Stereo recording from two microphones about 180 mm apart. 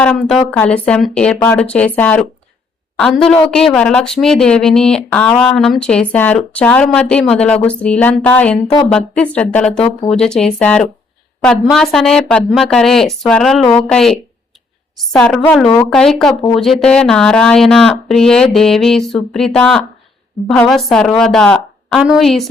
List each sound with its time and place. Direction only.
0.0 s speech: 5° left (ahead or behind)